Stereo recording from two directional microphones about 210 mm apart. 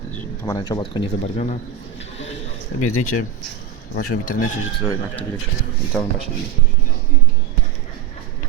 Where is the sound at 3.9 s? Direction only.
40° left (ahead or behind).